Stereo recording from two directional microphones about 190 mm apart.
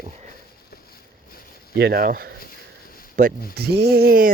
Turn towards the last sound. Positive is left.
turn(degrees=-55)  # may be behind; listen again after turning